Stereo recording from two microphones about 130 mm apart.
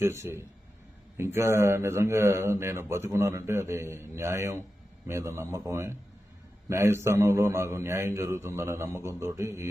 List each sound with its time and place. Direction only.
0.0 s speech: 20° right (ahead or behind)